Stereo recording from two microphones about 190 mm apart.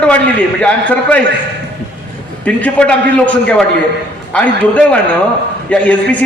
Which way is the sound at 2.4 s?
10° left (ahead or behind).